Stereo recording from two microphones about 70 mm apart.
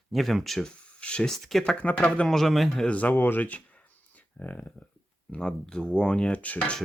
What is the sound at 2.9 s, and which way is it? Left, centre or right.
Speech, left.